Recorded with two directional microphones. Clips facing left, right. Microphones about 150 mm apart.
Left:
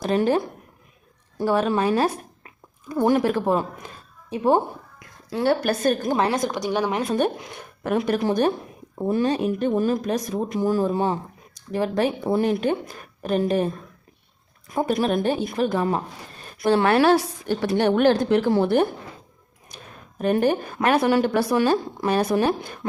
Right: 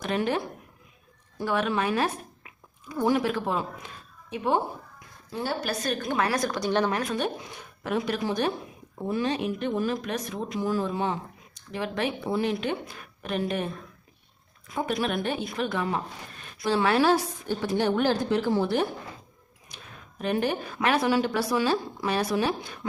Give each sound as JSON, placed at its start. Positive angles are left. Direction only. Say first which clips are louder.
{"t": 0.0, "sound": "a woman's voice", "louder": "left 6 dB", "side_deg": 35}
{"t": 2.9, "sound": "a woman's voice", "louder": "left 5 dB", "side_deg": 50}
{"t": 4.9, "sound": "a woman's voice", "louder": "left 9 dB", "side_deg": 80}
{"t": 6.1, "sound": "a woman's voice", "louder": "left 4 dB", "side_deg": 25}
{"t": 8.0, "sound": "a woman's voice", "louder": "left 8 dB", "side_deg": 50}
{"t": 16.6, "sound": "a woman's voice", "louder": "left 5 dB", "side_deg": 55}
{"t": 20.1, "sound": "a woman's voice", "louder": "left 6 dB", "side_deg": 45}